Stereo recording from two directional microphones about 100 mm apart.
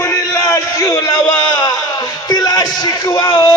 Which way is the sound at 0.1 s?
35° left (ahead or behind).